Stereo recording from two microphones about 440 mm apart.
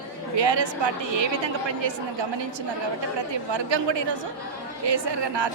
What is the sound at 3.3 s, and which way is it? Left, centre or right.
A woman's voice, right.